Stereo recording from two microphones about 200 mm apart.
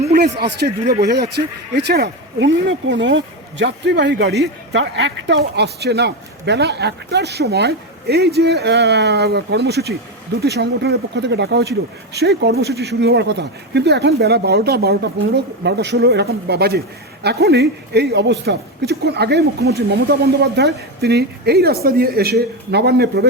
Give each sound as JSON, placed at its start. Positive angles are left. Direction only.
{"t": 0.1, "sound": "speech", "side_deg": -50}